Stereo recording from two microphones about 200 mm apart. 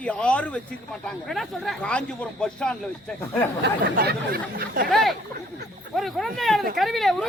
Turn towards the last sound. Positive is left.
turn(degrees=0)  # may be behind; listen again after turning